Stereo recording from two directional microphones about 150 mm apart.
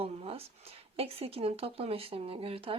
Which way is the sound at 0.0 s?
40° right (ahead or behind).